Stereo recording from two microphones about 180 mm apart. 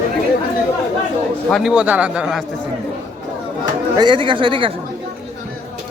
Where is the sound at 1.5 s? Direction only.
Centre (ahead or behind).